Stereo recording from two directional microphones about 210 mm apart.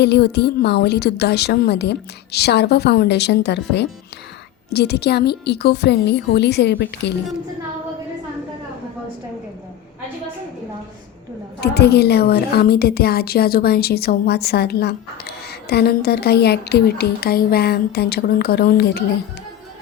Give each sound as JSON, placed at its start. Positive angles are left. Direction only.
{"t": 0.0, "sound": "a woman's voice", "side_deg": 55}
{"t": 11.6, "sound": "a woman's voice", "side_deg": 50}